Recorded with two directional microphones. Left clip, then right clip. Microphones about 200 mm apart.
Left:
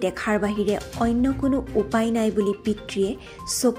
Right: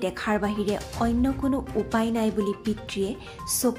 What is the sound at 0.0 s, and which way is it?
Speech, 15° left (ahead or behind).